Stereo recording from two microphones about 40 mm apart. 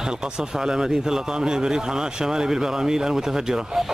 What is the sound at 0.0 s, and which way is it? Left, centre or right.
Speech, centre.